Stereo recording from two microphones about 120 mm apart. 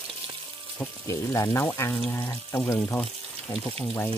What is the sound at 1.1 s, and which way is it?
Speech, 25° left (ahead or behind).